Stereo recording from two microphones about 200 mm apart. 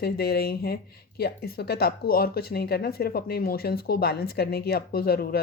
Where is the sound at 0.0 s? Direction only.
50° left (ahead or behind).